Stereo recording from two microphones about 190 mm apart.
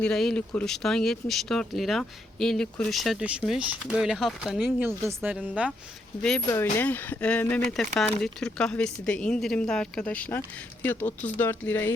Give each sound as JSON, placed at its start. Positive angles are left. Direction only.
{"t": 0.0, "sound": "speech", "side_deg": 5}
{"t": 6.5, "sound": "speech", "side_deg": 10}